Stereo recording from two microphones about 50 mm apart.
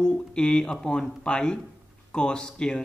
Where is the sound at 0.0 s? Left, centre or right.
Centre.